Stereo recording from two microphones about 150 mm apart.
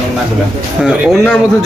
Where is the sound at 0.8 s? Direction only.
5° right (ahead or behind).